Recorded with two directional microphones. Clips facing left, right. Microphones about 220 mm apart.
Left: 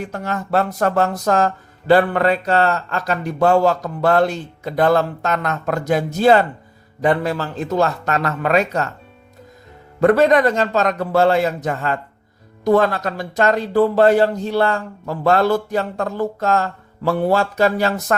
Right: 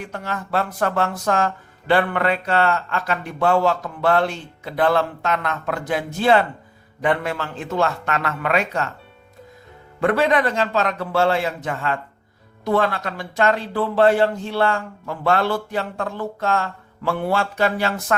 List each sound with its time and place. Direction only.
0.0 s speech: 45° left (ahead or behind)
10.0 s speech: 40° left (ahead or behind)